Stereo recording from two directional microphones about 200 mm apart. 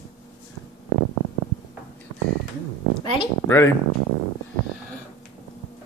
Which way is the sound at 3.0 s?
25° left (ahead or behind).